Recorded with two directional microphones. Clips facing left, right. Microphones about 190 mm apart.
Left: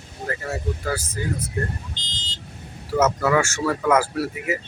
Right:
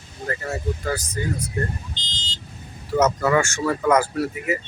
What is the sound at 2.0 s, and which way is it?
Vehicle, 55° left (ahead or behind).